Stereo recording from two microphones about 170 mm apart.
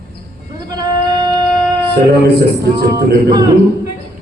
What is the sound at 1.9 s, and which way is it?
Speech, 75° right (ahead or behind).